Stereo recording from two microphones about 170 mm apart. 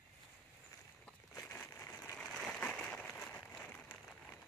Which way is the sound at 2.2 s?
Centre (ahead or behind).